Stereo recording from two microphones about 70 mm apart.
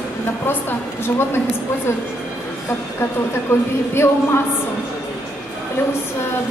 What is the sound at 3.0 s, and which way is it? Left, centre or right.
Speech, left.